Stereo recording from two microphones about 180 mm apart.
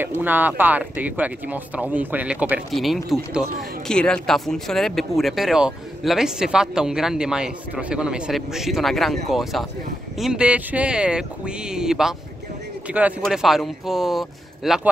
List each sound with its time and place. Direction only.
0.2 s speech: 10° right (ahead or behind)